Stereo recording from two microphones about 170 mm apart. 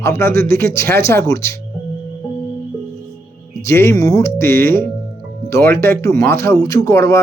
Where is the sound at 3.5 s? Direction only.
15° left (ahead or behind).